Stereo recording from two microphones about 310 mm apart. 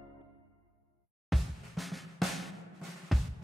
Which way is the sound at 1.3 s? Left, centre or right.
Centre.